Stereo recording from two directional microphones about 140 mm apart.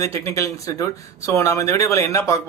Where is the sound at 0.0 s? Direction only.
20° left (ahead or behind).